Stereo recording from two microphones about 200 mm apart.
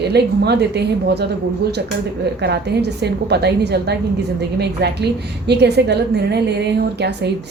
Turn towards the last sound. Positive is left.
turn(degrees=-55)  # may be behind; listen again after turning